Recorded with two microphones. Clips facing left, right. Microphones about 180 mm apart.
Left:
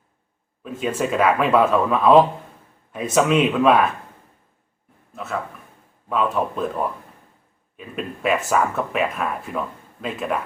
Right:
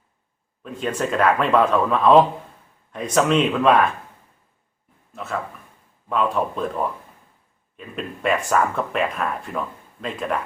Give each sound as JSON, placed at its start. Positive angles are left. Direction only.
{"t": 0.6, "sound": "speech", "side_deg": 5}
{"t": 5.1, "sound": "speech", "side_deg": 0}